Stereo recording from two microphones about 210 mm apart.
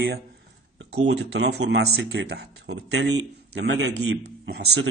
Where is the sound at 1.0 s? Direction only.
55° right (ahead or behind).